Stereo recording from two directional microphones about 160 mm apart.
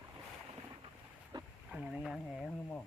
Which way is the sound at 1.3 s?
25° right (ahead or behind).